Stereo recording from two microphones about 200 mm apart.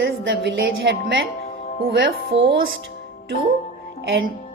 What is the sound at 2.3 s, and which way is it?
Speech, 25° right (ahead or behind).